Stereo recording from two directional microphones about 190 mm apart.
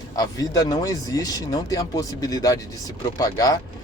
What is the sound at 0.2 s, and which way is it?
Speech, 20° left (ahead or behind).